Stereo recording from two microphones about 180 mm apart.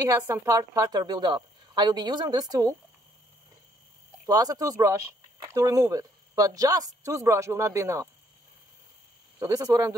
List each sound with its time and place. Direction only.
0.0 s a woman's voice: 15° right (ahead or behind)
4.3 s speech: 20° right (ahead or behind)
9.4 s speech: 20° right (ahead or behind)